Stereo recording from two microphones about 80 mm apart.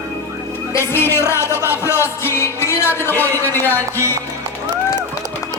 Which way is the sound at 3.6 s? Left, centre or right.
Left.